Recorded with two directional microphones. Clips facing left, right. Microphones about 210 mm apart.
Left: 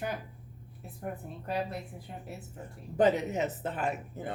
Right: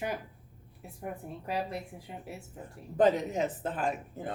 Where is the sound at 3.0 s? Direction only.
5° left (ahead or behind).